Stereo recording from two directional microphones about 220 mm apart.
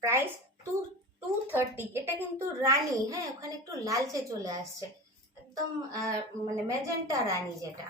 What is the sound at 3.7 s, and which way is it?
A child's voice, 15° right (ahead or behind).